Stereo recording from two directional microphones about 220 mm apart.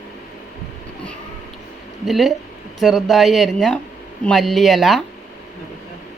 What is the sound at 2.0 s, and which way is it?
Speech, centre (ahead or behind).